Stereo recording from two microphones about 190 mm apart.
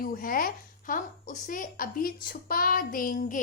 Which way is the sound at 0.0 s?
50° left (ahead or behind).